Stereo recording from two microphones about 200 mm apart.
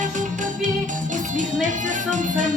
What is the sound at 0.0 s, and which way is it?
Music, 40° right (ahead or behind).